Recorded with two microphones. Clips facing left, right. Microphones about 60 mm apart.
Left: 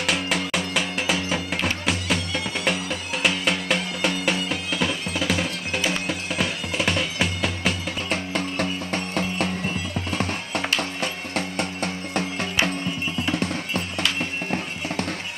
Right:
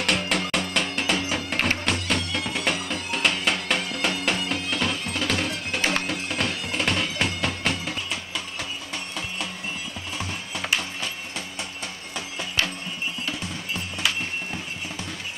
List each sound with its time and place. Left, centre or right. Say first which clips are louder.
0.0 s music: even; centre
8.1 s music: left 6 dB; left